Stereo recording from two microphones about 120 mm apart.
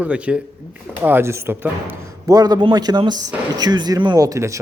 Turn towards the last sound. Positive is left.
turn(degrees=-25)  # may be behind; listen again after turning